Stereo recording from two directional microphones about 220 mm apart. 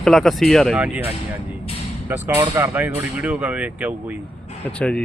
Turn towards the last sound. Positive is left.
turn(degrees=5)  # may be behind; listen again after turning